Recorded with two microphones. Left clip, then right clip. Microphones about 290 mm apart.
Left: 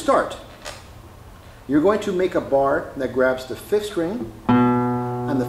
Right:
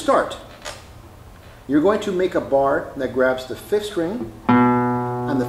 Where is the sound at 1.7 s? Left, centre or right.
Centre.